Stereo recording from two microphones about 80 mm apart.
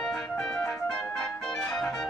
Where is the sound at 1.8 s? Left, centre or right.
Centre.